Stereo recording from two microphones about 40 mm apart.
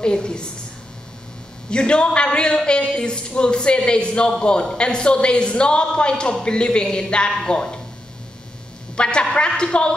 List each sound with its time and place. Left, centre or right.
0.0 s speech: left
1.7 s speech: left
8.9 s speech: left